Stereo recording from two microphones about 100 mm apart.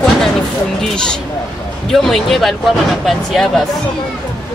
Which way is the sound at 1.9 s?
5° left (ahead or behind).